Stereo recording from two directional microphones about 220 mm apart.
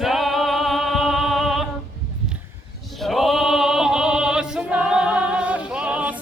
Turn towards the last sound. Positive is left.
turn(degrees=-5)  # may be behind; listen again after turning